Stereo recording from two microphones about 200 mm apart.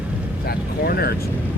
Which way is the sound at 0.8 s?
50° left (ahead or behind).